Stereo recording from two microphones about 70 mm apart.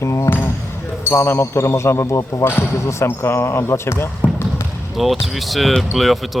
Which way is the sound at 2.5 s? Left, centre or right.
Left.